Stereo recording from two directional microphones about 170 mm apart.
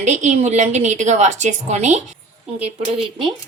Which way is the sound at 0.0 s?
45° right (ahead or behind).